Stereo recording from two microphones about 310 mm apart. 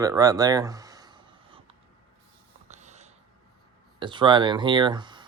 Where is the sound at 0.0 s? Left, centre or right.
Centre.